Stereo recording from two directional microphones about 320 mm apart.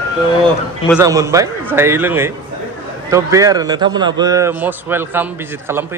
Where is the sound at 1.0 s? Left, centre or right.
Centre.